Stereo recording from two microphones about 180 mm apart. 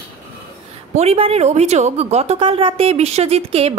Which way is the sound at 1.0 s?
35° right (ahead or behind).